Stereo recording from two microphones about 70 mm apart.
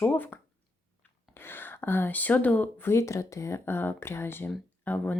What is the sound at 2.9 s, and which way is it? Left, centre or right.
Speech, left.